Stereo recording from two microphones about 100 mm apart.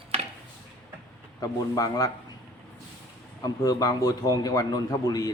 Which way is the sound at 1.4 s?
35° left (ahead or behind).